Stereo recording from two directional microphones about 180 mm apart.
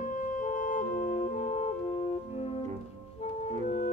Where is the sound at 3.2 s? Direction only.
35° left (ahead or behind).